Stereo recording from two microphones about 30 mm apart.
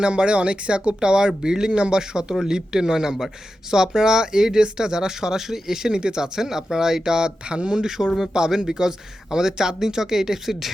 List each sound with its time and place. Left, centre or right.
0.0 s speech: right
7.9 s speech: centre